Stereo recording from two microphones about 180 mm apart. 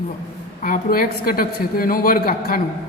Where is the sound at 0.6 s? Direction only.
50° left (ahead or behind).